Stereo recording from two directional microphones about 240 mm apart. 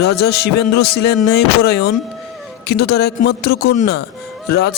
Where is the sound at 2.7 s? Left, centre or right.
Left.